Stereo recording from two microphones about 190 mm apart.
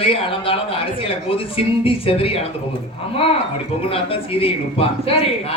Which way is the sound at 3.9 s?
30° left (ahead or behind).